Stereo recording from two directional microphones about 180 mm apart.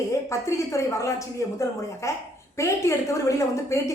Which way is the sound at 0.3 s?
15° left (ahead or behind).